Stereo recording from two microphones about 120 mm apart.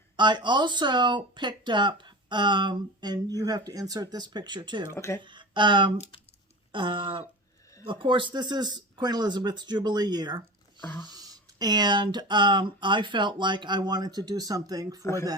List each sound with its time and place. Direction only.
0.2 s speech: 40° right (ahead or behind)
4.9 s speech: 25° left (ahead or behind)
5.2 s speech: 40° right (ahead or behind)
6.7 s a sound: 40° right (ahead or behind)
7.9 s speech: 45° right (ahead or behind)